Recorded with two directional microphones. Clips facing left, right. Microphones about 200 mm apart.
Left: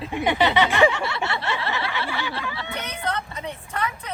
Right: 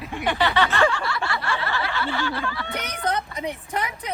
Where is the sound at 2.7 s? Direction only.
15° right (ahead or behind).